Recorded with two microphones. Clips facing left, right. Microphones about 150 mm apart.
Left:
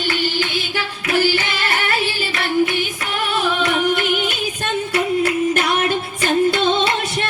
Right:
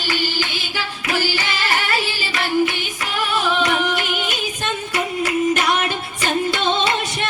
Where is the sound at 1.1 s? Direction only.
55° left (ahead or behind).